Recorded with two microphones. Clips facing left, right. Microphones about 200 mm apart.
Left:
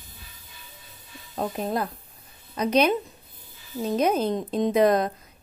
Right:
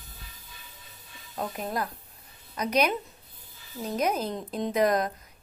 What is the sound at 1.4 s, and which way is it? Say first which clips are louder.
A woman's voice: left 4 dB; 25° left (ahead or behind).